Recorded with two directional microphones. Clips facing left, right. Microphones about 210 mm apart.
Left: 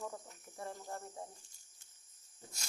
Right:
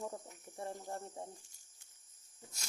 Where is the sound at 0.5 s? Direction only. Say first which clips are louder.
Right 2 dB; 25° right (ahead or behind).